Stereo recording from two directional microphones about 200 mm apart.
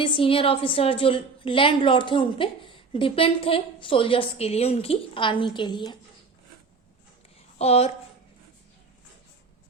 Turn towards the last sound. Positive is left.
turn(degrees=30)  # may be behind; listen again after turning